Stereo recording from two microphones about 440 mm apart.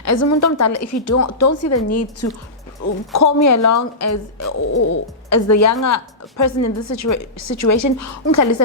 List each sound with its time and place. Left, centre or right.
0.0 s a woman's voice: left